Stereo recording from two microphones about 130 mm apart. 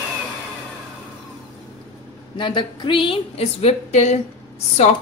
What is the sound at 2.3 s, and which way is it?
A woman's voice, 40° left (ahead or behind).